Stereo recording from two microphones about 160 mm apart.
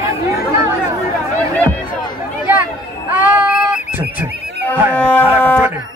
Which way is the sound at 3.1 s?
10° right (ahead or behind).